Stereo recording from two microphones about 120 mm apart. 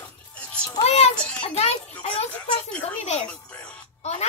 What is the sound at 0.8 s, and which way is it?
Speech, 60° left (ahead or behind).